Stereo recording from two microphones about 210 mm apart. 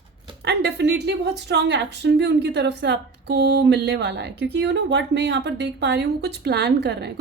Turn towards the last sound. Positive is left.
turn(degrees=-50)  # may be behind; listen again after turning